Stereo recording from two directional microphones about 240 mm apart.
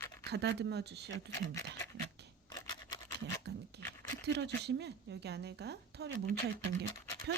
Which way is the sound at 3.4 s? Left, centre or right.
Right.